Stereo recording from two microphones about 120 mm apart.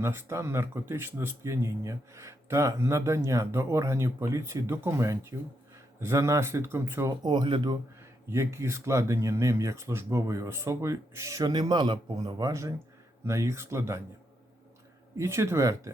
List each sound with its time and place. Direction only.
0.0 s speech: 20° right (ahead or behind)
7.2 s speech: 40° right (ahead or behind)
8.3 s speech: 25° right (ahead or behind)
15.2 s speech: 25° right (ahead or behind)